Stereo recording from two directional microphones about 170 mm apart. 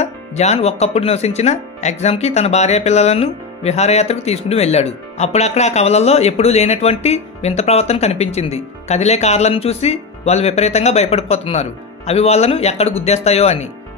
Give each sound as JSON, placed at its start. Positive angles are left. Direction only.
{"t": 0.0, "sound": "speech", "side_deg": 40}